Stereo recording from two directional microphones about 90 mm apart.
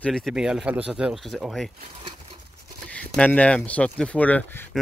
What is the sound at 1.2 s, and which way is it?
Speech, centre (ahead or behind).